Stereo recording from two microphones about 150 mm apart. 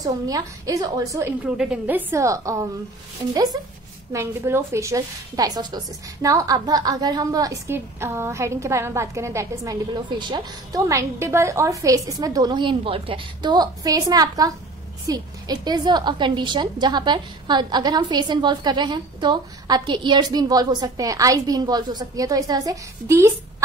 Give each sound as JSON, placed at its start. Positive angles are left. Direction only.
{"t": 0.0, "sound": "a woman's voice", "side_deg": -25}
{"t": 1.4, "sound": "a woman's voice", "side_deg": -10}
{"t": 4.1, "sound": "a woman's voice", "side_deg": -15}
{"t": 10.0, "sound": "a woman's voice", "side_deg": -30}